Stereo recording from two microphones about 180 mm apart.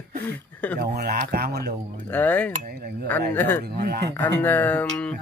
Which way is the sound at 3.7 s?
60° right (ahead or behind).